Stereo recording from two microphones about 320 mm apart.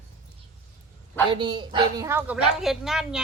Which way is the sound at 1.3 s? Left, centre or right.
Centre.